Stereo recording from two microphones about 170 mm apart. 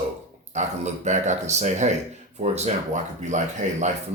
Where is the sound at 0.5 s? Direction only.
45° right (ahead or behind).